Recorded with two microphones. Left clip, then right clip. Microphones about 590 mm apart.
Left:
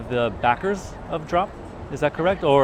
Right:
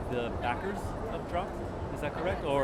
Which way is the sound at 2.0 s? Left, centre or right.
Left.